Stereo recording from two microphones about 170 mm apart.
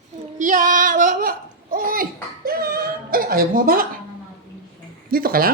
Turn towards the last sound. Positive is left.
turn(degrees=-60)  # may be behind; listen again after turning